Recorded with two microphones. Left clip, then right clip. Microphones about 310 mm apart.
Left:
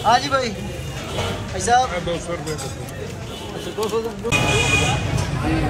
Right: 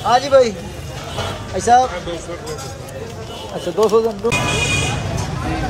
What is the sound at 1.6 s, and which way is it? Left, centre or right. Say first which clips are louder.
Speech: right 5 dB; centre.